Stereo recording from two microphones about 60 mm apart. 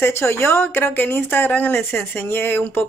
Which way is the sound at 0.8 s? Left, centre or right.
Left.